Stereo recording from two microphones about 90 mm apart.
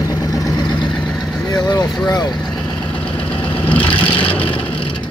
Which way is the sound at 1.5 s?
40° left (ahead or behind).